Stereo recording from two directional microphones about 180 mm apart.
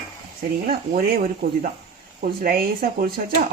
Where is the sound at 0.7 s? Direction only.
60° right (ahead or behind).